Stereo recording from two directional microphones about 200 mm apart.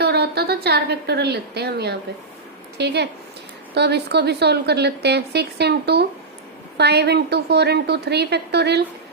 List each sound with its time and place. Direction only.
0.0 s a woman's voice: 55° right (ahead or behind)